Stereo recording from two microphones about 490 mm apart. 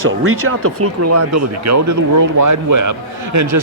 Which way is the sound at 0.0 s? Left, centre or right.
Right.